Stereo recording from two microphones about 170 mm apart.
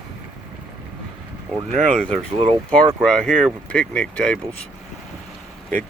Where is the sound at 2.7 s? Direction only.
5° left (ahead or behind).